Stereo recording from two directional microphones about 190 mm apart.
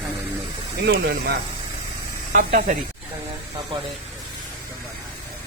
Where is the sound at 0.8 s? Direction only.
60° right (ahead or behind).